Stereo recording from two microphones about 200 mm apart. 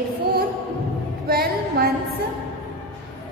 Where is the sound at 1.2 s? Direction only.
50° right (ahead or behind).